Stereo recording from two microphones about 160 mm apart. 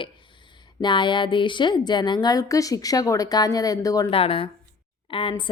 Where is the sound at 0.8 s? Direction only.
30° left (ahead or behind).